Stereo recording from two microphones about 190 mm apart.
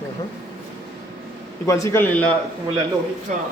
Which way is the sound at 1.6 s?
15° left (ahead or behind).